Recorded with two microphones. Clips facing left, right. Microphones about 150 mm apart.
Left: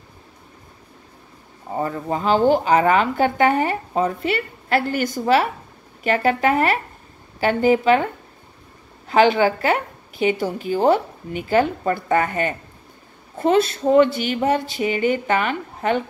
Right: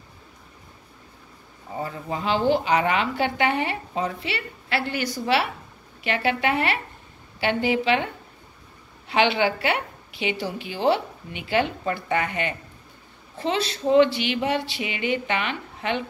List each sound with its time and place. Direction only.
1.7 s a woman's voice: 45° left (ahead or behind)
9.1 s a woman's voice: 45° left (ahead or behind)